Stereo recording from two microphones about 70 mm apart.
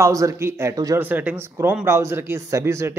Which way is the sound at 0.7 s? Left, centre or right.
Right.